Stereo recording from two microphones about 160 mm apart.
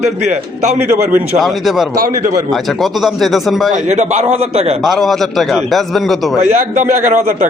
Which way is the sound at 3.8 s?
45° right (ahead or behind).